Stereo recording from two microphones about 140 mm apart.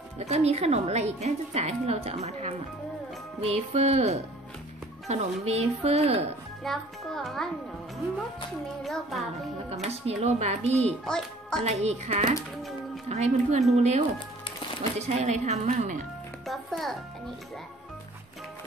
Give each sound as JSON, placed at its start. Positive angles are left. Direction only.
{"t": 0.2, "sound": "a woman's voice", "side_deg": -50}
{"t": 6.6, "sound": "a child's voice", "side_deg": 5}
{"t": 8.8, "sound": "a child's voice", "side_deg": 0}
{"t": 9.8, "sound": "a woman's voice", "side_deg": -50}
{"t": 11.1, "sound": "a child's voice", "side_deg": 5}
{"t": 11.6, "sound": "a woman's voice", "side_deg": -50}
{"t": 16.4, "sound": "a child's voice", "side_deg": 0}